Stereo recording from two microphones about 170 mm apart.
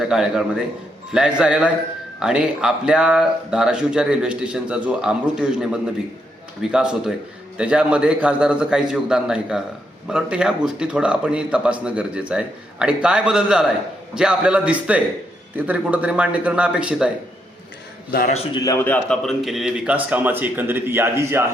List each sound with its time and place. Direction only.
0.0 s a man's voice: 5° right (ahead or behind)
18.6 s a man's voice: 20° left (ahead or behind)
19.0 s a man's voice: 5° left (ahead or behind); by 21.4 s 15° right (ahead or behind)